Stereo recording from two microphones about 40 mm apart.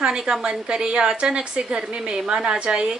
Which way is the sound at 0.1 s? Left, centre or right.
Centre.